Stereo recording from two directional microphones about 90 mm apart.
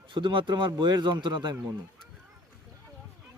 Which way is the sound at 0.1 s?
65° right (ahead or behind).